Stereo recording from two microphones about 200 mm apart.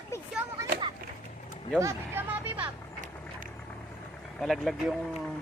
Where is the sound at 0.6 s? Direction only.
25° right (ahead or behind).